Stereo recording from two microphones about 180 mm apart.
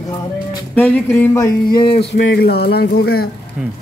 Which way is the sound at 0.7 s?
10° left (ahead or behind).